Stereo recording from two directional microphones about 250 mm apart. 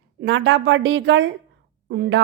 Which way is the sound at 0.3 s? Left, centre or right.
Right.